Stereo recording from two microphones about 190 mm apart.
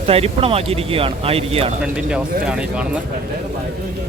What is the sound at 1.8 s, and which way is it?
Speech, 5° right (ahead or behind).